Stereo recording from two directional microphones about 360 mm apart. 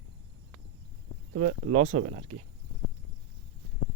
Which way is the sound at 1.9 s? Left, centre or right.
Centre.